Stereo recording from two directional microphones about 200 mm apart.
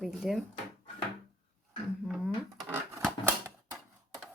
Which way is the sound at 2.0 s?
5° right (ahead or behind).